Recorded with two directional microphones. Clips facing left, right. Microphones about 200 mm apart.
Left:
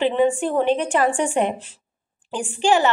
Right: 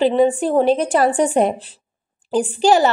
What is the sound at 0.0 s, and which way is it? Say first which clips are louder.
A woman's voice: right 4 dB; 35° right (ahead or behind).